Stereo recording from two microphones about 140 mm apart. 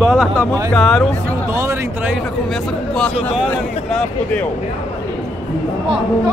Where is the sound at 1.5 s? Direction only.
20° right (ahead or behind).